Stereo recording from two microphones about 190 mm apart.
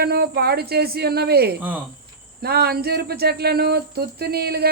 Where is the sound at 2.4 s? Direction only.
55° right (ahead or behind).